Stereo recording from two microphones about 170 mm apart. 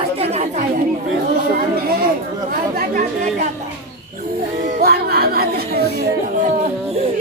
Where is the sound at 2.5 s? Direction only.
55° right (ahead or behind).